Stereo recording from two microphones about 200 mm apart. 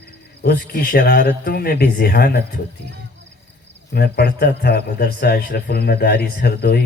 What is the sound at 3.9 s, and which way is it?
Speech, 50° left (ahead or behind).